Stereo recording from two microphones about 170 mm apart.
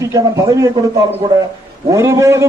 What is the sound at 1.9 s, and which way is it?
Speech, 15° right (ahead or behind).